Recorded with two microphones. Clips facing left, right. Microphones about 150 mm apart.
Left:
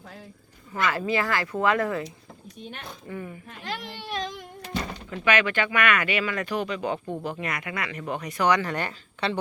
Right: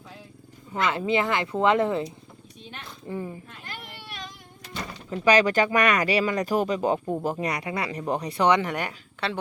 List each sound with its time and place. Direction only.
0.7 s speech: 20° right (ahead or behind)
3.6 s a sound: 90° left
5.1 s speech: 35° right (ahead or behind)
8.7 s a woman's voice: 10° right (ahead or behind)